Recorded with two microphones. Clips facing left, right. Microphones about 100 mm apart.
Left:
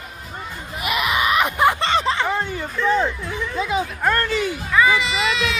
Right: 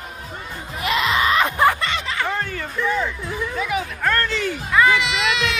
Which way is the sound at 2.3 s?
20° left (ahead or behind).